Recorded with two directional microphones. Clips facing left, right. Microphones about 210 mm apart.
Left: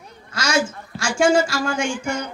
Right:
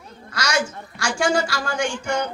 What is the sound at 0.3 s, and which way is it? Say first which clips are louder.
A woman's voice: left 2 dB; 25° left (ahead or behind).